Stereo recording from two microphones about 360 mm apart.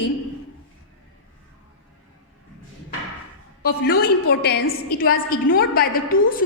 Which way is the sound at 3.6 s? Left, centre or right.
Left.